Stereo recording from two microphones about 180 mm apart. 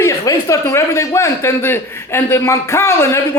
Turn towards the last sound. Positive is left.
turn(degrees=15)  # may be behind; listen again after turning